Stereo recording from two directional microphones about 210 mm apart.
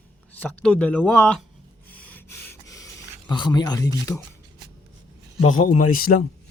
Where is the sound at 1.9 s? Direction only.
10° left (ahead or behind).